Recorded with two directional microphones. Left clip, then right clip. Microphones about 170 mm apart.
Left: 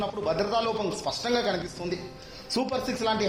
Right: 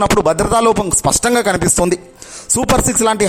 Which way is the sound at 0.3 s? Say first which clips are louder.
Right 14 dB; 55° right (ahead or behind).